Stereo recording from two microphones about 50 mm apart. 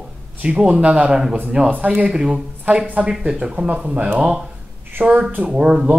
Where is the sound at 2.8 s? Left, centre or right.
Right.